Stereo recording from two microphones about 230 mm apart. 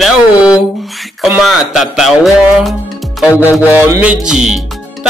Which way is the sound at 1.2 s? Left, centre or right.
Centre.